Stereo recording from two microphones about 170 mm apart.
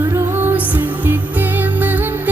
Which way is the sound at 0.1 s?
10° right (ahead or behind).